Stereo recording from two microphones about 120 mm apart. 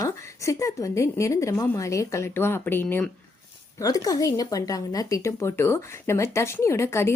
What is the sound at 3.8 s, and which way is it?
A woman's voice, 30° left (ahead or behind).